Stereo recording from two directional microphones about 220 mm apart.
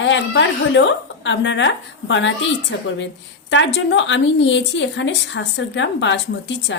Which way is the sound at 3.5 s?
55° left (ahead or behind).